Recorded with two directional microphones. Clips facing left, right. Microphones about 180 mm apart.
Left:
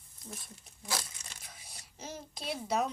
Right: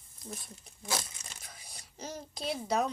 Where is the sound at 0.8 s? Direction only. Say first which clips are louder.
Right 2 dB; 25° right (ahead or behind).